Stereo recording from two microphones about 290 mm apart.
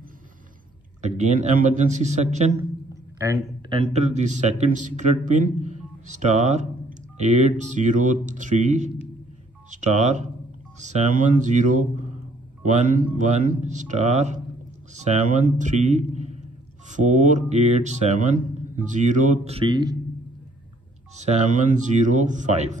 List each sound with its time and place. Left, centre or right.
1.0 s a man's voice: right
2.9 s a sound: centre
3.8 s a man's voice: right
21.2 s a man's voice: right